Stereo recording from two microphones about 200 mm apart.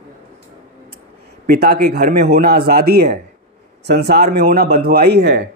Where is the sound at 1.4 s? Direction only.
50° right (ahead or behind).